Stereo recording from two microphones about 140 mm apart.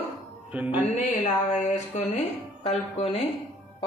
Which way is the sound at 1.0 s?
60° left (ahead or behind).